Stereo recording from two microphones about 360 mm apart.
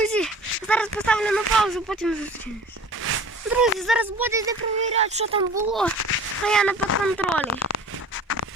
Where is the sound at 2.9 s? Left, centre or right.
Right.